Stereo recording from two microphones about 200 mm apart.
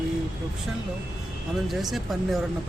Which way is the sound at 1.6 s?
Centre (ahead or behind).